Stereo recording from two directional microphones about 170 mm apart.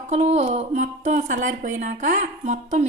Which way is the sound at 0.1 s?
40° right (ahead or behind).